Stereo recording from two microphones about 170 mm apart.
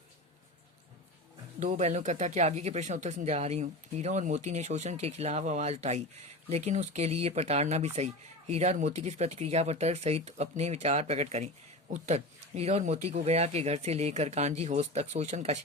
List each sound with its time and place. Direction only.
1.5 s speech: 45° right (ahead or behind)